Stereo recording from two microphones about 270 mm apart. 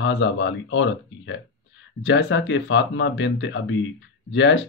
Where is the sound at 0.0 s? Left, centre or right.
Left.